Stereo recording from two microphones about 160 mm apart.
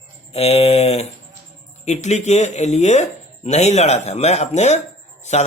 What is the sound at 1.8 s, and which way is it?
Speech, 45° left (ahead or behind).